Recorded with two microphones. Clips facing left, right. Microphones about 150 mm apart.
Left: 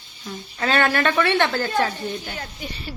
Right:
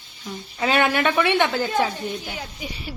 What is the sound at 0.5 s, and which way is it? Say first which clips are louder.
A woman's voice: even; 10° right (ahead or behind).